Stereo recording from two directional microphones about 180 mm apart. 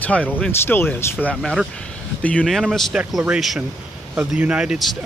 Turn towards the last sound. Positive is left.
turn(degrees=0)  # may be behind; listen again after turning